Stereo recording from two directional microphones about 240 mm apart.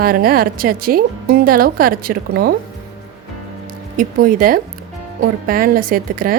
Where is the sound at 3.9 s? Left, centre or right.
Right.